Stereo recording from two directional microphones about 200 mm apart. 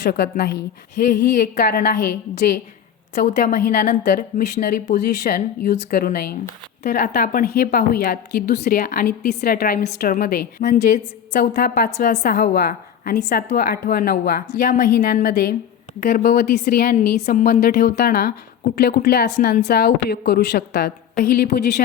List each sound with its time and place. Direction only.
0.0 s speech: 55° left (ahead or behind)
1.5 s a woman's voice: 45° left (ahead or behind)
6.8 s a woman's voice: 40° left (ahead or behind)
17.2 s a woman's voice: 35° left (ahead or behind)
17.4 s a woman's voice: 50° left (ahead or behind)